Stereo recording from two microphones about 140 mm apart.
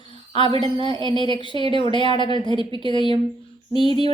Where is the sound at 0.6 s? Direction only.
35° left (ahead or behind).